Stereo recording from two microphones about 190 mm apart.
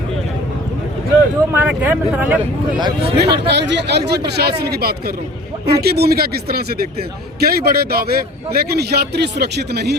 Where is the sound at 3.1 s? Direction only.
60° right (ahead or behind).